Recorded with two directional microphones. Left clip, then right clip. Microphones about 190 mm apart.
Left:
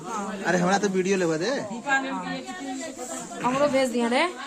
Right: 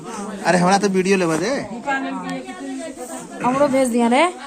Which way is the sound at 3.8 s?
50° right (ahead or behind).